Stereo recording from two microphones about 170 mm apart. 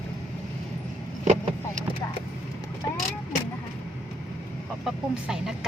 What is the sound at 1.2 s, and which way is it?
Vehicle, 45° right (ahead or behind).